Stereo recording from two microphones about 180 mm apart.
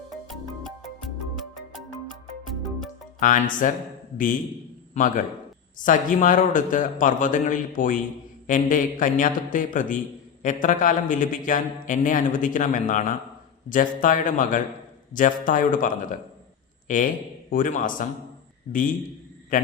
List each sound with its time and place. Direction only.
0.3 s music: centre (ahead or behind)
3.2 s a man's voice: 45° left (ahead or behind)
4.9 s a man's voice: 45° left (ahead or behind)